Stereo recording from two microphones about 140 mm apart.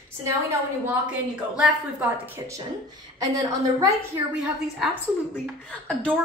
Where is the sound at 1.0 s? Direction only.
5° right (ahead or behind); by 3.9 s 25° right (ahead or behind).